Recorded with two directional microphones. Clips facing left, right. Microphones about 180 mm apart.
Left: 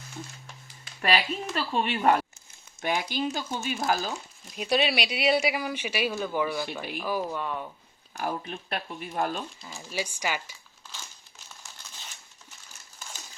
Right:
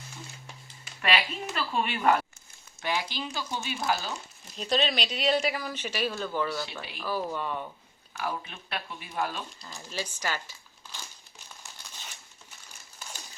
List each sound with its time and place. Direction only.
1.0 s a woman's voice: 40° left (ahead or behind)
2.8 s speech: 50° left (ahead or behind)
4.5 s speech: 10° left (ahead or behind)
7.3 s speech: centre (ahead or behind)
8.1 s speech: 45° left (ahead or behind)
9.6 s speech: 5° left (ahead or behind)